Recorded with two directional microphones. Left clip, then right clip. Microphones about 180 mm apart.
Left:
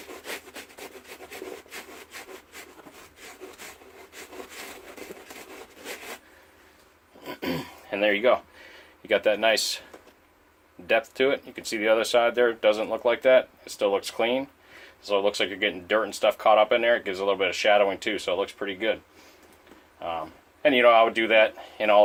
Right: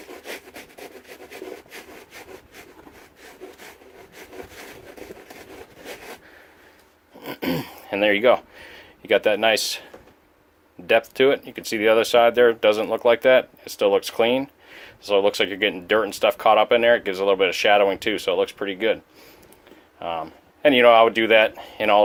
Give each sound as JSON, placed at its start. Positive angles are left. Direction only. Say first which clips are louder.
{"t": 0.3, "sound": "rub", "louder": "right 1 dB", "side_deg": -10}
{"t": 7.2, "sound": "a sound", "louder": "right 5 dB", "side_deg": -50}
{"t": 10.8, "sound": "speech", "louder": "right 5 dB", "side_deg": -45}
{"t": 20.0, "sound": "speech", "louder": "right 4 dB", "side_deg": -55}